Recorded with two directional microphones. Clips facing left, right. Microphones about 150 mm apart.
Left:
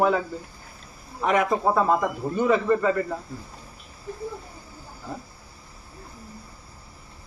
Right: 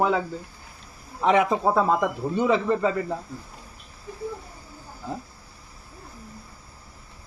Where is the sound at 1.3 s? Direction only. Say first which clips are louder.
Right 1 dB; 15° right (ahead or behind).